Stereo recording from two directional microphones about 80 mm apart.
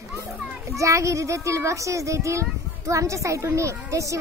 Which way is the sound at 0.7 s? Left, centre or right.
Right.